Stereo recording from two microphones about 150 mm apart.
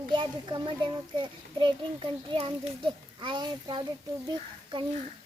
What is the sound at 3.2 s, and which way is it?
Speech, 30° right (ahead or behind).